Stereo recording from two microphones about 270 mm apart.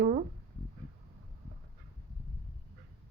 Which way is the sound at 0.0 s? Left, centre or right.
Right.